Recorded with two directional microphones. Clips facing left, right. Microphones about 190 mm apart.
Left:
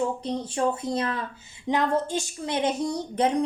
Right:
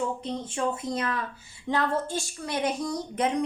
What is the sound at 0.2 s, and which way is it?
A woman's voice, 35° left (ahead or behind).